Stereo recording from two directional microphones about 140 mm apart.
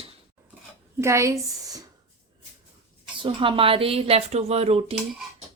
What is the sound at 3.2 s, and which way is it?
A woman's voice, 40° right (ahead or behind).